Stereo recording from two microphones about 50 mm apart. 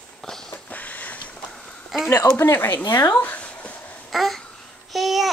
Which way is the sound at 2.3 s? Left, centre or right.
Left.